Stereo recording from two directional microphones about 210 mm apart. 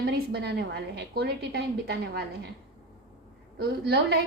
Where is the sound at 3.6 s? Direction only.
50° right (ahead or behind).